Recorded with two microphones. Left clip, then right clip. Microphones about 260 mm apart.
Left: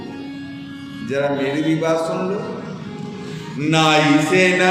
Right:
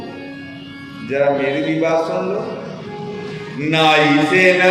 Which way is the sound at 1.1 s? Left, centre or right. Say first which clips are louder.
Right 4 dB; left.